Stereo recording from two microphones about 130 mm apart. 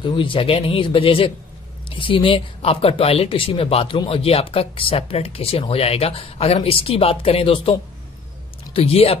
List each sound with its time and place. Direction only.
0.0 s speech: 40° left (ahead or behind)
8.7 s speech: 50° left (ahead or behind)